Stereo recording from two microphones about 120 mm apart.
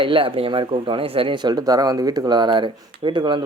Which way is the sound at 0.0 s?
45° right (ahead or behind).